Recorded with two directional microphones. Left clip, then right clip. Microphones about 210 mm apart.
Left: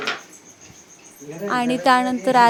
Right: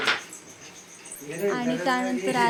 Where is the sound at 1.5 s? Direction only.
30° left (ahead or behind).